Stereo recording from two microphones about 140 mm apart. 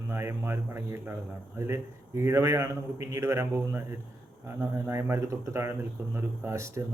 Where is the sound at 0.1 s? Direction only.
15° right (ahead or behind).